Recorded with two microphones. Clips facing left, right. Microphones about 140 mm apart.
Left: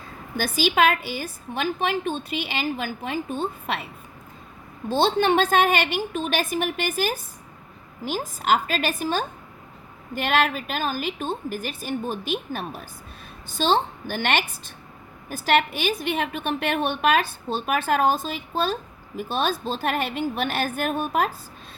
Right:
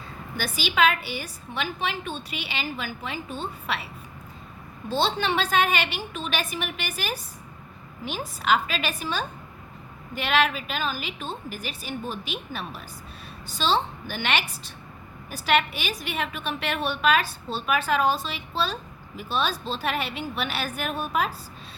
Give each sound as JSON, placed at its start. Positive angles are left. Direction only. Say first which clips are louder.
{"t": 1.5, "sound": "a woman's voice", "louder": "left 5 dB", "side_deg": 45}
{"t": 4.9, "sound": "a woman's voice", "louder": "left 5 dB", "side_deg": 50}